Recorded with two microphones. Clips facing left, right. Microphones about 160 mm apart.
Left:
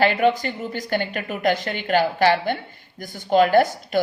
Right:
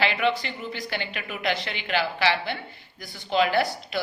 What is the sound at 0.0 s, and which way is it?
A woman's voice, 45° left (ahead or behind).